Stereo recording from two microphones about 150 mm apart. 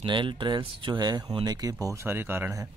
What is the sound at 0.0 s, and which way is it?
Speech, 30° right (ahead or behind).